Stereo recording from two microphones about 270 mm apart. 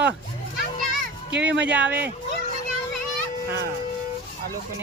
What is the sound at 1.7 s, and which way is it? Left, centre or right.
Speech, centre.